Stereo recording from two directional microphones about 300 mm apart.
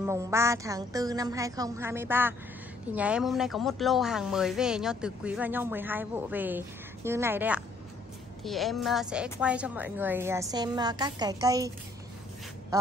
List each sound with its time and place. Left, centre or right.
0.0 s a woman's voice: centre